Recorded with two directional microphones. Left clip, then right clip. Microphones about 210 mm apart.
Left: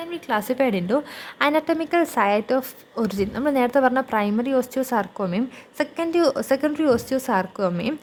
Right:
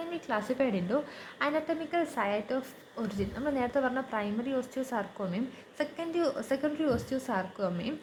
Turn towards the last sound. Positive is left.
turn(degrees=50)  # may be behind; listen again after turning